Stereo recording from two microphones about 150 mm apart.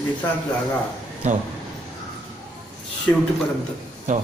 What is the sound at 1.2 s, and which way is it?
Speech, 55° right (ahead or behind).